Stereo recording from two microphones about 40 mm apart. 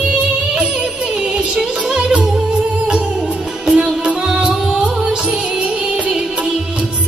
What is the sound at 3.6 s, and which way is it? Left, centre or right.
Music, right.